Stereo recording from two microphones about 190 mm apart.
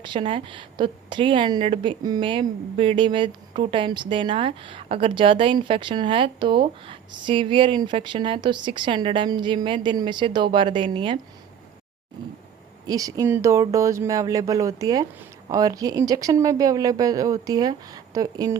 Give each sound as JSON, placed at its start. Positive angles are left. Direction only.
{"t": 0.0, "sound": "a woman's voice", "side_deg": -25}
{"t": 12.9, "sound": "a woman's voice", "side_deg": -20}